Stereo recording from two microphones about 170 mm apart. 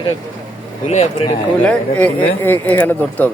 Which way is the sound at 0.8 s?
40° left (ahead or behind).